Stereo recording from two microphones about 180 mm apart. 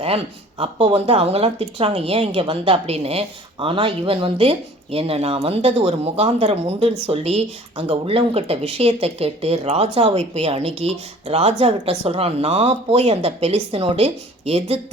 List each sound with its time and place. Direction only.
0.6 s speech: 30° right (ahead or behind)